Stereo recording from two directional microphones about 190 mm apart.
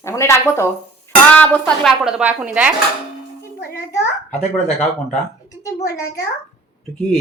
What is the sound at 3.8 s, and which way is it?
Speech, 10° left (ahead or behind).